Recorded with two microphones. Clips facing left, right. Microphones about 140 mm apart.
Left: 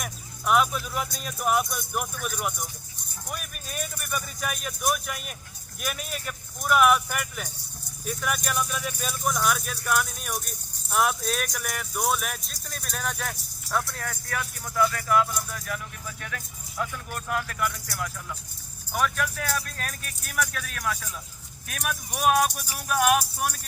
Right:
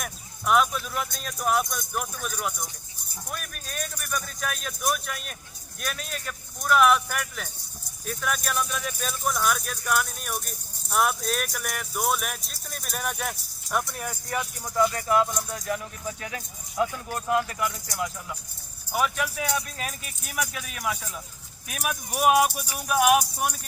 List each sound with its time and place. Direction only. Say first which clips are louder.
0.0 s speech: even; centre (ahead or behind); by 14.8 s 15° right (ahead or behind)
14.8 s speech: left 1 dB; 30° right (ahead or behind); by 23.6 s 5° right (ahead or behind)